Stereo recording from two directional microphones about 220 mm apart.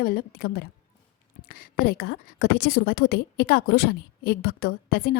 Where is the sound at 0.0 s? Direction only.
45° left (ahead or behind).